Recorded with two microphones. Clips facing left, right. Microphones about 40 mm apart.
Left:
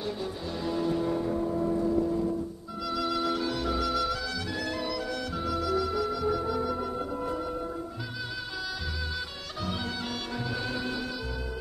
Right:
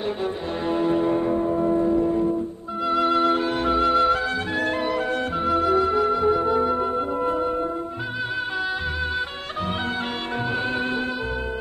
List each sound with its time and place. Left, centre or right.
0.7 s church bell: right
2.9 s music: right